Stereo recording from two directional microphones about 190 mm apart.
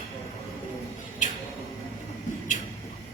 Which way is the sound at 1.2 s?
40° left (ahead or behind).